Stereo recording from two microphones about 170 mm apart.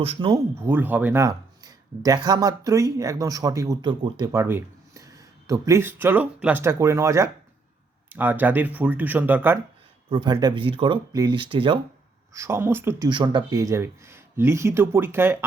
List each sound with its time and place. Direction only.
0.0 s speech: 30° right (ahead or behind)
0.6 s speech: 10° right (ahead or behind)
4.3 s speech: 15° right (ahead or behind)
10.1 s speech: 25° right (ahead or behind)
12.3 s speech: 15° right (ahead or behind)
13.1 s speech: 25° right (ahead or behind)